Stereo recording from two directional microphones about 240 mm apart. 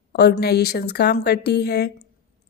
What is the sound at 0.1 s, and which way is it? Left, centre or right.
A woman's voice, left.